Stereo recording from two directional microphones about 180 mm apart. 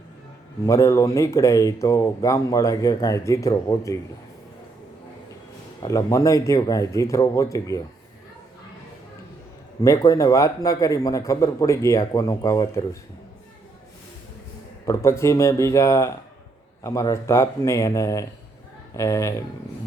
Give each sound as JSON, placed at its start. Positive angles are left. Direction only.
{"t": 0.6, "sound": "speech", "side_deg": 20}
{"t": 5.8, "sound": "speech", "side_deg": 20}
{"t": 9.8, "sound": "speech", "side_deg": 20}
{"t": 14.8, "sound": "speech", "side_deg": 15}